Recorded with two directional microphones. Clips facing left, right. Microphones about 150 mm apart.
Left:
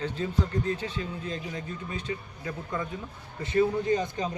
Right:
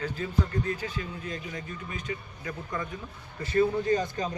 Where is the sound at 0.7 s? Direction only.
30° left (ahead or behind).